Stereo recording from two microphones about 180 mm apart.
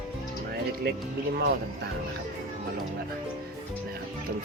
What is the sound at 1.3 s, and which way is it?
Speech, 60° right (ahead or behind).